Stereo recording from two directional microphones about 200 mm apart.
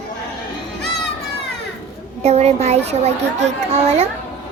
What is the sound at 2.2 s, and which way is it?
A child's voice, 35° right (ahead or behind).